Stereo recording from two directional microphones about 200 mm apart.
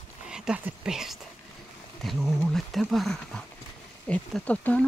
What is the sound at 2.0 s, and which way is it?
Speech, centre (ahead or behind).